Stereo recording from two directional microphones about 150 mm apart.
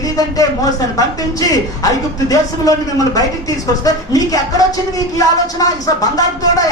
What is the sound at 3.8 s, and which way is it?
A man's voice, 25° left (ahead or behind).